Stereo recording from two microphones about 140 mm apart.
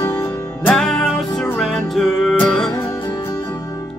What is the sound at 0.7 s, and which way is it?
Music, 5° left (ahead or behind).